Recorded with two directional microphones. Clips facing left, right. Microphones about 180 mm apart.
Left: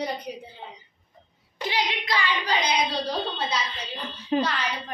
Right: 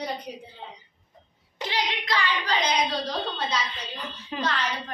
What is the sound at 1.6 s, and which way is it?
Speech, 10° left (ahead or behind).